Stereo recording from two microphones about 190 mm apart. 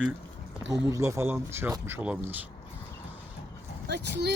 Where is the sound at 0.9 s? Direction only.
15° right (ahead or behind).